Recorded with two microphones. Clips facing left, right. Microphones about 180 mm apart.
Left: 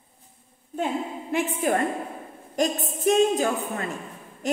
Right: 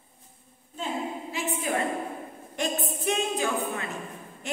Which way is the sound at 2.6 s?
40° left (ahead or behind).